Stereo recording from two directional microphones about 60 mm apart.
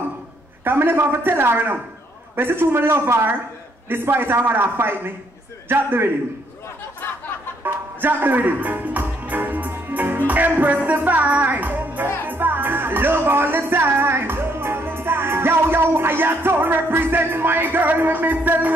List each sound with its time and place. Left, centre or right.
0.7 s a man's voice: right
7.6 s music: right